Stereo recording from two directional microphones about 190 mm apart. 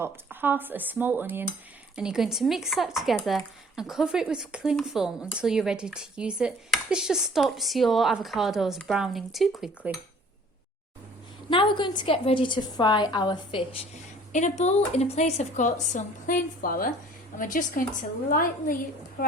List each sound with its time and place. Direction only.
0.0 s dishes: 10° right (ahead or behind)
2.0 s speech: 5° right (ahead or behind)
11.4 s a woman's voice: 25° left (ahead or behind)
14.3 s a woman's voice: 40° left (ahead or behind)